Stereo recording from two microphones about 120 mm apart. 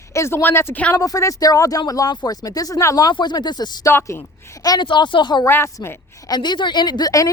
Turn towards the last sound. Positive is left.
turn(degrees=30)  # may be behind; listen again after turning